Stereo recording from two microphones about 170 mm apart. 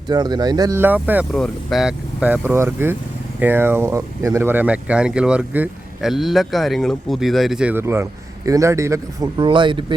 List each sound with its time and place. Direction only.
0.1 s speech: 25° right (ahead or behind)